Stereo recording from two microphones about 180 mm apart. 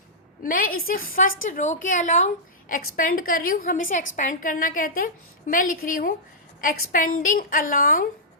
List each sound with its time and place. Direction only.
0.4 s a woman's voice: 50° left (ahead or behind)